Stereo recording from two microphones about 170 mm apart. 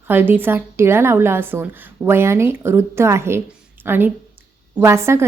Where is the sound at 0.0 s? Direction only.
10° right (ahead or behind).